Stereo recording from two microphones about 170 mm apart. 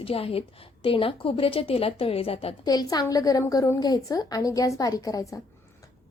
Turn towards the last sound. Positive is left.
turn(degrees=20)  # may be behind; listen again after turning